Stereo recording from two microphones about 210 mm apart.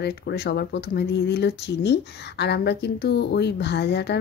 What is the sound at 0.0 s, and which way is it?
Speech, 50° left (ahead or behind).